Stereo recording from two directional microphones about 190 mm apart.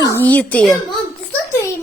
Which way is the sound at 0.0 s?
10° left (ahead or behind).